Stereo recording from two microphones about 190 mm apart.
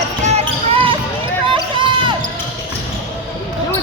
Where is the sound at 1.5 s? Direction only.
25° right (ahead or behind).